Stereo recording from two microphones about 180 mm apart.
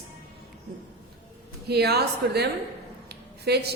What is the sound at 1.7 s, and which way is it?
A woman's voice, 65° right (ahead or behind).